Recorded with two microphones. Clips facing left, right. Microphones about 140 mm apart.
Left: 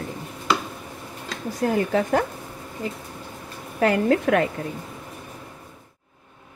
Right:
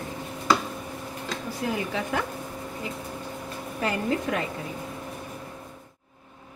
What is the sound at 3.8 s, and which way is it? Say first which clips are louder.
Speech: left 8 dB; 70° left (ahead or behind).